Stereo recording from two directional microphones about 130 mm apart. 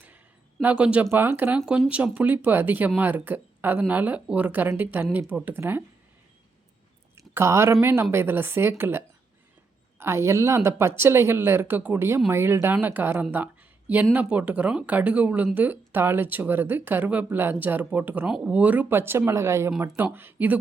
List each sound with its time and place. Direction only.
0.6 s speech: 10° right (ahead or behind)
7.2 s a woman's voice: 20° right (ahead or behind)